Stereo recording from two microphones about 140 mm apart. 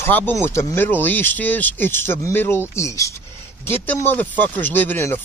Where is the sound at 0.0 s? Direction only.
15° left (ahead or behind).